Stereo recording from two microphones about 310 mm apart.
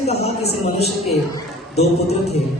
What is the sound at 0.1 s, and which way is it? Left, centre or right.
Speech, centre.